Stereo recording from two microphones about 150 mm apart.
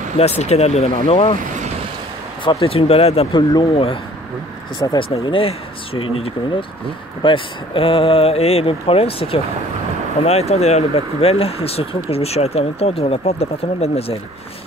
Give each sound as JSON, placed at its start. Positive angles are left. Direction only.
{"t": 0.2, "sound": "speech", "side_deg": 45}
{"t": 2.4, "sound": "speech", "side_deg": 40}